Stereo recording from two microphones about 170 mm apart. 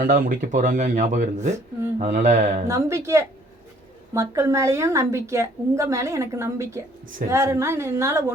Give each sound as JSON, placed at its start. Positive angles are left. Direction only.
{"t": 0.0, "sound": "speech", "side_deg": -55}
{"t": 2.6, "sound": "a woman's voice", "side_deg": -15}